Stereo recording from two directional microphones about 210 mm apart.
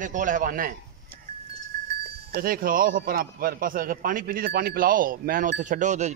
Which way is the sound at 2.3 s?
45° right (ahead or behind).